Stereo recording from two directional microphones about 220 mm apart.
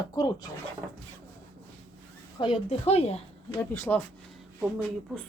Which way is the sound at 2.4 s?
25° left (ahead or behind).